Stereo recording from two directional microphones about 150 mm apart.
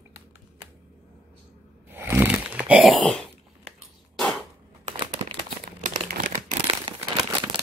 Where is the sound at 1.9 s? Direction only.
15° right (ahead or behind).